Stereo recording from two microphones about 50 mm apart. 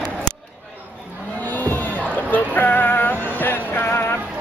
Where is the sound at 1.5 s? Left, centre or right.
Left.